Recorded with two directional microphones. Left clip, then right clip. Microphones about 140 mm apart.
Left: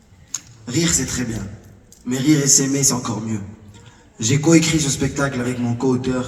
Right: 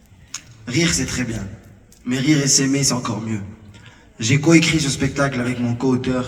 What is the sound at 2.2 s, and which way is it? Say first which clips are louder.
A man's voice: left 1 dB; 25° right (ahead or behind).